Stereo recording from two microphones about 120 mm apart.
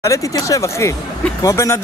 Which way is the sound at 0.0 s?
25° left (ahead or behind).